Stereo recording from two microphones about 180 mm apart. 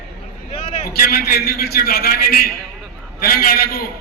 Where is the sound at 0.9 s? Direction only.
55° left (ahead or behind).